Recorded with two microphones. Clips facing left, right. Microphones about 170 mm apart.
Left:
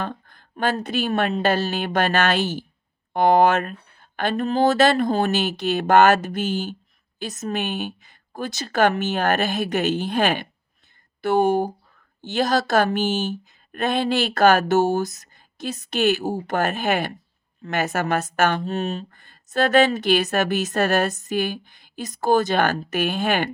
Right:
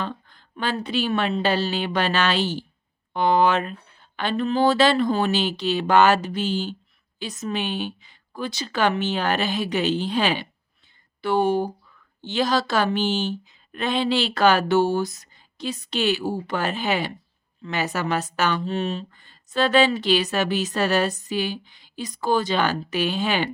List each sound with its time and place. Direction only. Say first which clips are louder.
0.0 s a woman's voice: left 1 dB; 50° left (ahead or behind)